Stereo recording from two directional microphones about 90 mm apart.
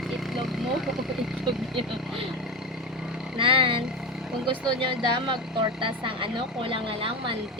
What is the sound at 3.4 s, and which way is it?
Speech, 75° right (ahead or behind).